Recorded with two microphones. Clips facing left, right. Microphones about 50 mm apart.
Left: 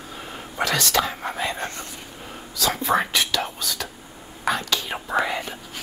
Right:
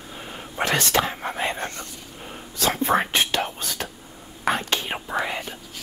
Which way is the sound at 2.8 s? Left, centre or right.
Right.